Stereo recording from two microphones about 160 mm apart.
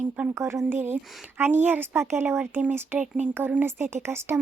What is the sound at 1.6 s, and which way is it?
Speech, 10° right (ahead or behind).